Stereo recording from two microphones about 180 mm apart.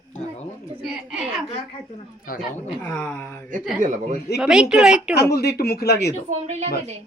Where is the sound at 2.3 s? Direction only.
50° left (ahead or behind).